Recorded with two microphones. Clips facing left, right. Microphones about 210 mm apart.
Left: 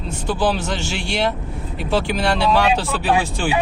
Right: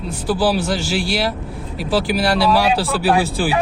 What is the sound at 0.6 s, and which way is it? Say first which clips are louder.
Speech: right 4 dB; 35° right (ahead or behind).